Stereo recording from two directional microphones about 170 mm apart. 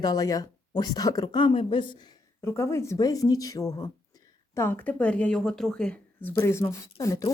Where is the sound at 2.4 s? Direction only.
15° left (ahead or behind).